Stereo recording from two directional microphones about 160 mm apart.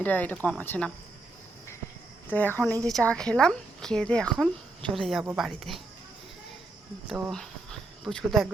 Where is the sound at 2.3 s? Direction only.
10° left (ahead or behind).